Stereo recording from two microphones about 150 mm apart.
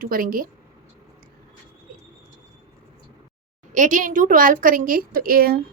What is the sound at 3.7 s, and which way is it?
A woman's voice, 60° right (ahead or behind).